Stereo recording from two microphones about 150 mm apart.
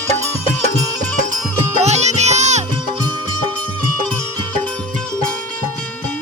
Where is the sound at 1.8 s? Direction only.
50° right (ahead or behind).